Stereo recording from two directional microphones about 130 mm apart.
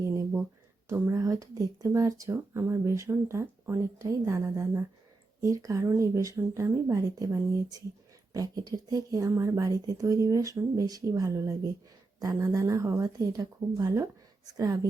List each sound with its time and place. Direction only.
0.9 s speech: 20° right (ahead or behind)